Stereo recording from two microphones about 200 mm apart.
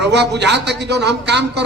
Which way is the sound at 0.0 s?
60° right (ahead or behind).